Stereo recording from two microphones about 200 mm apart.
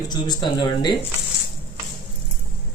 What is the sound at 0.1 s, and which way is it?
Speech, 20° left (ahead or behind).